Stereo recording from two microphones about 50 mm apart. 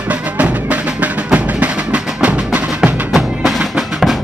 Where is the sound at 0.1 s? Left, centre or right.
Right.